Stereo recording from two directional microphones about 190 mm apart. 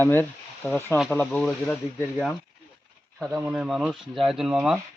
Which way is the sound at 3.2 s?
10° right (ahead or behind).